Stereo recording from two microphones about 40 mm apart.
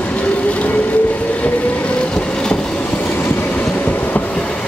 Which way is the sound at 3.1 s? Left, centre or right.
Left.